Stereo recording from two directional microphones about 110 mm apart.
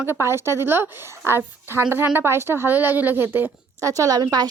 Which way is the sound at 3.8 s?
30° right (ahead or behind).